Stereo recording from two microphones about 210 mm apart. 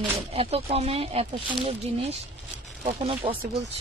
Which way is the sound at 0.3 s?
30° right (ahead or behind).